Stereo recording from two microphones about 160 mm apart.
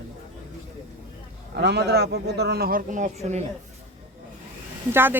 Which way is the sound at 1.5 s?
90° right.